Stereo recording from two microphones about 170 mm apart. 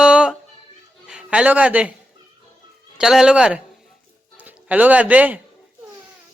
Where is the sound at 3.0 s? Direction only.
5° right (ahead or behind).